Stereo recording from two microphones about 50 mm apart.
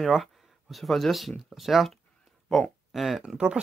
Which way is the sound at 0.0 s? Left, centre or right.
Centre.